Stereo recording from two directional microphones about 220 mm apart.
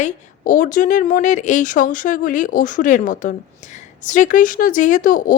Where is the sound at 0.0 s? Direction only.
35° left (ahead or behind).